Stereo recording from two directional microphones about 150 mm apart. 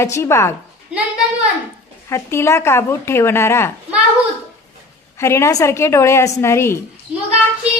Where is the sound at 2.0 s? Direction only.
20° left (ahead or behind).